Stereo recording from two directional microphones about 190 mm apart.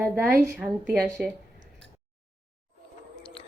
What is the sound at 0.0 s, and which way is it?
Speech, 15° right (ahead or behind).